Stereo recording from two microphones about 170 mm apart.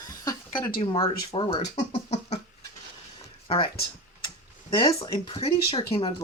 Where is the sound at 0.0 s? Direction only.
20° left (ahead or behind).